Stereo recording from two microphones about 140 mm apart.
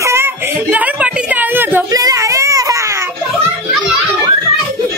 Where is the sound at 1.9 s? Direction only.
25° right (ahead or behind).